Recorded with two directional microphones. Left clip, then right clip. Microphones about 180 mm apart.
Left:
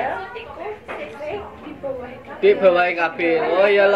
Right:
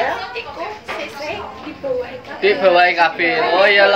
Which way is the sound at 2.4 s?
40° left (ahead or behind).